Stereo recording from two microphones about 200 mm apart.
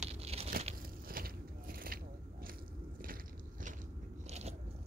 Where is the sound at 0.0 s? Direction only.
30° right (ahead or behind).